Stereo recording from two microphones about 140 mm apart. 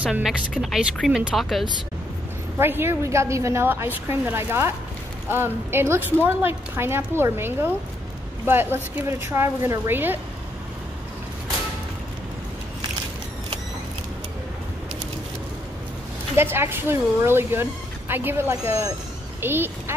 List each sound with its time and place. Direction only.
0.0 s speech: 5° right (ahead or behind)
2.6 s speech: 15° right (ahead or behind)
16.3 s speech: 15° right (ahead or behind)